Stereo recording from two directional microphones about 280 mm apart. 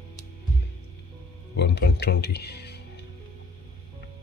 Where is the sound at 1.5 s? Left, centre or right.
Left.